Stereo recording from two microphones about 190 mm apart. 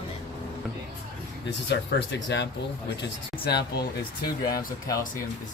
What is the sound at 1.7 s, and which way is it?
Speech, 70° left (ahead or behind).